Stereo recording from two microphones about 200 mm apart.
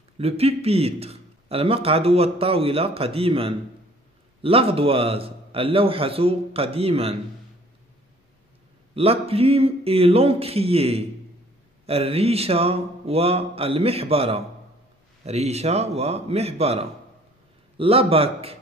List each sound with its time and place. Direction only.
0.2 s a man's voice: 30° right (ahead or behind)
8.9 s a man's voice: 30° right (ahead or behind)